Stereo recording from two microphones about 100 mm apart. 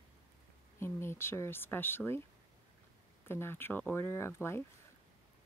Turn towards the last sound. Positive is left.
turn(degrees=25)  # may be behind; listen again after turning